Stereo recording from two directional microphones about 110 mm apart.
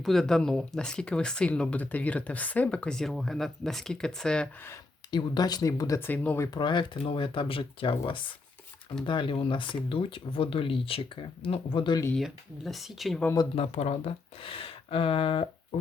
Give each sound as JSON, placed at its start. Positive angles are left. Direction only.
{"t": 0.0, "sound": "speech", "side_deg": 0}
{"t": 5.1, "sound": "speech", "side_deg": 40}
{"t": 6.0, "sound": "speech", "side_deg": 20}
{"t": 6.5, "sound": "speech", "side_deg": 45}
{"t": 12.1, "sound": "speech", "side_deg": 0}
{"t": 13.6, "sound": "speech", "side_deg": 75}